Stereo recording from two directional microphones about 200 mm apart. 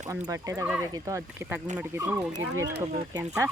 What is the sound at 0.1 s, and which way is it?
Speech, 15° right (ahead or behind).